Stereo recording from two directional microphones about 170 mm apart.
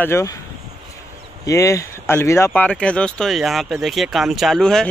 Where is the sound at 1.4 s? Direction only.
20° left (ahead or behind).